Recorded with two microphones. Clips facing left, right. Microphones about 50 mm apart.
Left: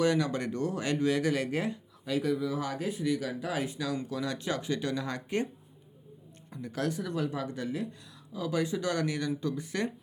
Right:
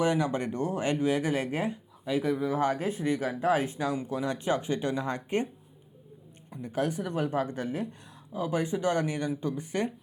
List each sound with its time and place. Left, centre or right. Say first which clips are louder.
0.0 s speech: right 1 dB; right
6.5 s speech: right 3 dB; right